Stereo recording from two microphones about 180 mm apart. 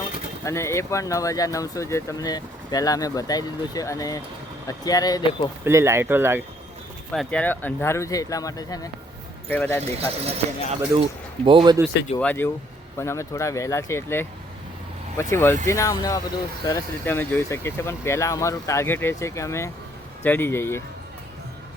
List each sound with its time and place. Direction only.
0.4 s speech: 15° left (ahead or behind)
5.6 s speech: 15° right (ahead or behind)
7.1 s speech: 5° left (ahead or behind)
10.0 s speech: 35° right (ahead or behind)
12.2 s speech: 10° left (ahead or behind)